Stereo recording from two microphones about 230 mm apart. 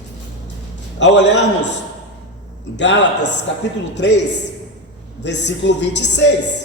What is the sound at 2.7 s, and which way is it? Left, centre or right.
Speech, left.